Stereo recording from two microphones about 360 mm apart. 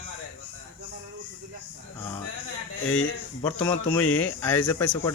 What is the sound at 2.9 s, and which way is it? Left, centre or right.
Speech, left.